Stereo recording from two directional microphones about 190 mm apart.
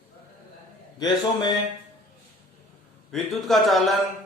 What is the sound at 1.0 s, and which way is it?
Speech, 20° left (ahead or behind).